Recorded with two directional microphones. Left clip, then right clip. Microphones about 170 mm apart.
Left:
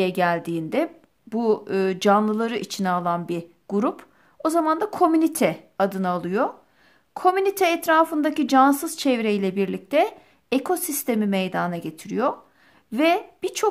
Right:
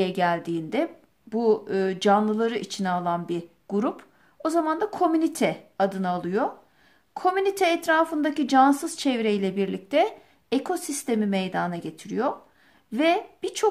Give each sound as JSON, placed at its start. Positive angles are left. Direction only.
{"t": 0.0, "sound": "a woman's voice", "side_deg": 30}